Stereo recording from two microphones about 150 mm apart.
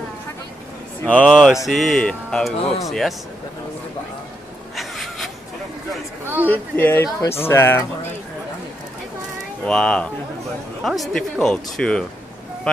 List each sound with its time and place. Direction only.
1.0 s speech: 10° left (ahead or behind)
1.3 s speech: 5° right (ahead or behind)
4.7 s a sound: centre (ahead or behind)
6.2 s a sound: 15° right (ahead or behind)
6.5 s speech: 15° left (ahead or behind)
9.7 s speech: 5° left (ahead or behind)